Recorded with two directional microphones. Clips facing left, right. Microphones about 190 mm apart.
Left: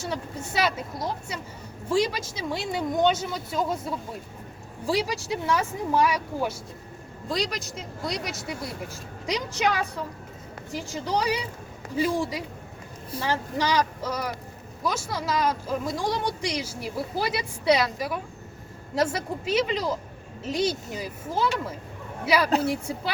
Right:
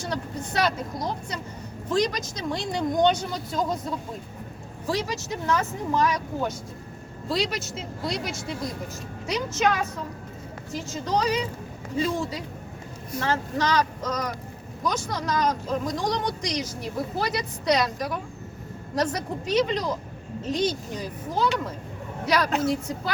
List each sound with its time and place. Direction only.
0.0 s speech: 5° left (ahead or behind)
7.3 s speech: 5° right (ahead or behind)
9.2 s speech: 15° left (ahead or behind)
22.7 s speech: 10° left (ahead or behind)